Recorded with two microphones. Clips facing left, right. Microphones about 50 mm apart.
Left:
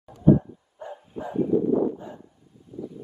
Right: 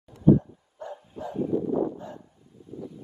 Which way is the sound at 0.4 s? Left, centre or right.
Centre.